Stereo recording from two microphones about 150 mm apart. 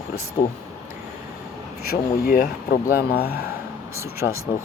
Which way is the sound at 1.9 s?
75° left (ahead or behind).